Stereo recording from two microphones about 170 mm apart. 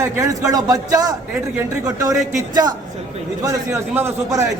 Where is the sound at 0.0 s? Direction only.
20° right (ahead or behind).